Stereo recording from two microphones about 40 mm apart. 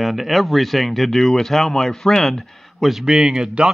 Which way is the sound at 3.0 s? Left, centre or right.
Centre.